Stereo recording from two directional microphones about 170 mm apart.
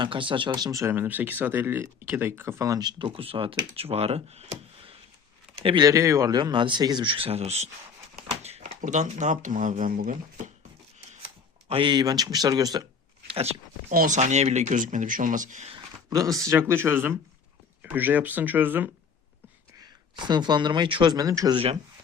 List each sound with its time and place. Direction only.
0.0 s speech: 30° right (ahead or behind); by 10.5 s 50° right (ahead or behind)
11.7 s speech: 30° right (ahead or behind)
13.3 s speech: 35° right (ahead or behind)
13.9 s speech: 55° right (ahead or behind)
14.2 s speech: 40° right (ahead or behind)
16.0 s speech: 20° right (ahead or behind)
19.8 s speech: 25° right (ahead or behind)